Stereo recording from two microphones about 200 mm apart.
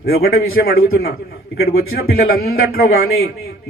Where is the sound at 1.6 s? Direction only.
50° left (ahead or behind).